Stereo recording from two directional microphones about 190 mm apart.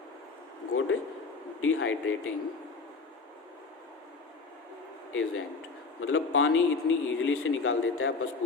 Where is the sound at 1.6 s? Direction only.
90° left.